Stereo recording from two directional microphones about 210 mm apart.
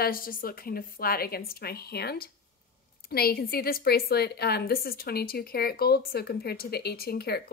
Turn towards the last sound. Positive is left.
turn(degrees=50)  # may be behind; listen again after turning